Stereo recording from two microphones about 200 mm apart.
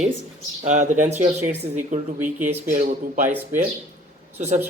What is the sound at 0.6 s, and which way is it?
Speech, 40° right (ahead or behind).